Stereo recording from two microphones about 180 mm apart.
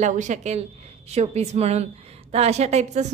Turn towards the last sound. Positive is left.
turn(degrees=-40)  # may be behind; listen again after turning